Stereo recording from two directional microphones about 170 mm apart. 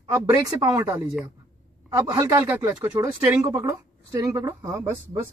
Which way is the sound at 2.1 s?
15° right (ahead or behind).